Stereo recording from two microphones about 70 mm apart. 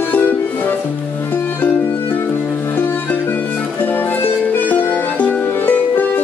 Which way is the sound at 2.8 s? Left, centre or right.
Left.